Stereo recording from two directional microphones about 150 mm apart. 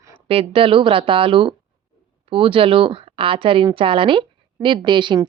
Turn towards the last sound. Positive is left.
turn(degrees=-30)  # may be behind; listen again after turning